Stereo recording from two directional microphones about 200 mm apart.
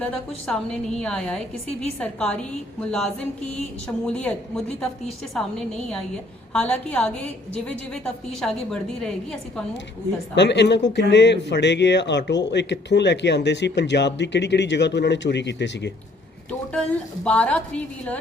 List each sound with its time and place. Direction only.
0.0 s a woman's voice: 5° left (ahead or behind)
10.3 s speech: 60° left (ahead or behind)
16.5 s a woman's voice: 5° left (ahead or behind)